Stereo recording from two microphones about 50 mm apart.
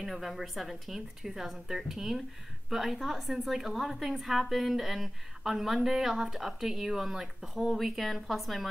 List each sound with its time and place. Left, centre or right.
0.0 s a woman's voice: centre